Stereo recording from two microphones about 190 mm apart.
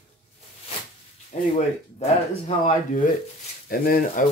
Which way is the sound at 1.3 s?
40° left (ahead or behind).